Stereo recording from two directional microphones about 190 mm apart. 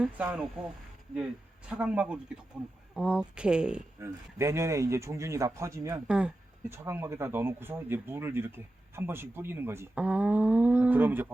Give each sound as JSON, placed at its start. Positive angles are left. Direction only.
{"t": 0.0, "sound": "speech", "side_deg": -5}